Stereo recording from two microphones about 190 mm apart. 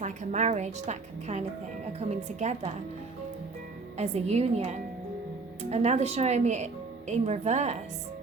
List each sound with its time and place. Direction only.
0.0 s a woman's voice: 40° right (ahead or behind)
3.9 s a woman's voice: 35° right (ahead or behind)